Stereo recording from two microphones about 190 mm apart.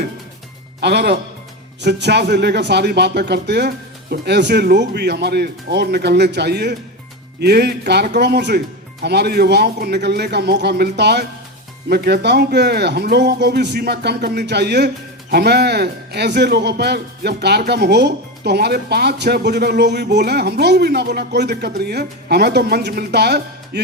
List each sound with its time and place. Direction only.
0.8 s a man's voice: 60° right (ahead or behind)